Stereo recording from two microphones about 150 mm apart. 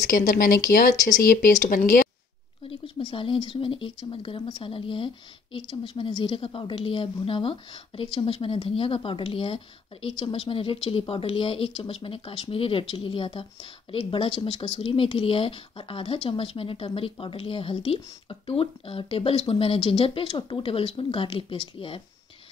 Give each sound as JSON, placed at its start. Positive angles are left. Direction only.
{"t": 0.1, "sound": "speech", "side_deg": 65}
{"t": 2.7, "sound": "speech", "side_deg": 35}